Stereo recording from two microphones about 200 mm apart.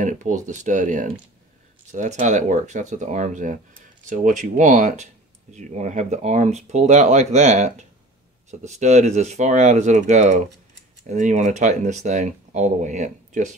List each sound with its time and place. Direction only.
0.0 s speech: 40° right (ahead or behind)